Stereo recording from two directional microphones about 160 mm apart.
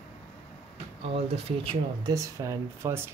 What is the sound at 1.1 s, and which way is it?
Speech, 40° right (ahead or behind).